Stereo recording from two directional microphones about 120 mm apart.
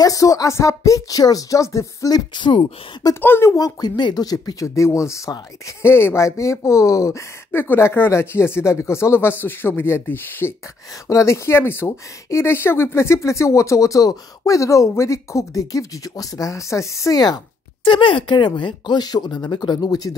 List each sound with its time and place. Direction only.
0.0 s speech: 30° left (ahead or behind)
3.2 s speech: 20° left (ahead or behind)
3.5 s speech: 35° left (ahead or behind)
17.8 s speech: 45° left (ahead or behind)